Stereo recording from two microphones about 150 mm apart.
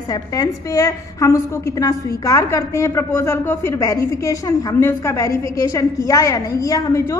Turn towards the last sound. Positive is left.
turn(degrees=20)  # may be behind; listen again after turning